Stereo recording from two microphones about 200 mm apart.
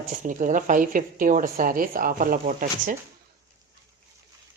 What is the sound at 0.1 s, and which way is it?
A woman's voice, 40° right (ahead or behind).